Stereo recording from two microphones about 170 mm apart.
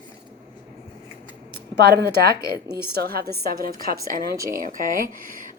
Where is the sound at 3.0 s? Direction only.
60° right (ahead or behind).